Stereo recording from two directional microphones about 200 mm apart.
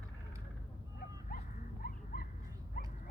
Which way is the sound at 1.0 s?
45° left (ahead or behind).